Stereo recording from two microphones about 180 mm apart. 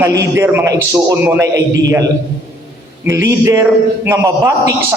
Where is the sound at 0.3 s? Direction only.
15° right (ahead or behind).